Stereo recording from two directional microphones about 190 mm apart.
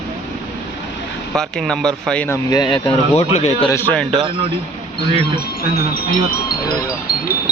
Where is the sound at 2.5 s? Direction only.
20° left (ahead or behind).